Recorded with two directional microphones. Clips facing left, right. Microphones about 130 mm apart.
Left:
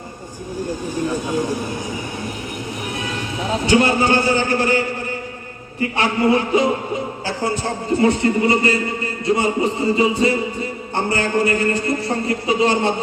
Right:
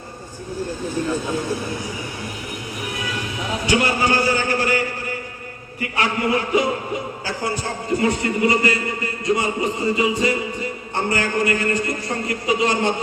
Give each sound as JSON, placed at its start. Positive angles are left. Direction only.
{"t": 0.5, "sound": "a man's voice", "side_deg": 15}
{"t": 5.8, "sound": "a man's voice", "side_deg": 30}